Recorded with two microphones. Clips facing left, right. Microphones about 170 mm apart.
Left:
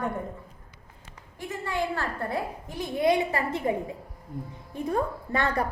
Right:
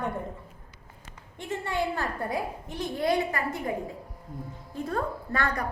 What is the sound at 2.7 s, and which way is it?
A woman's voice, 10° left (ahead or behind).